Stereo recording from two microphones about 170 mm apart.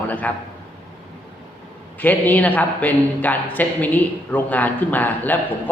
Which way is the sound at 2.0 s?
10° left (ahead or behind).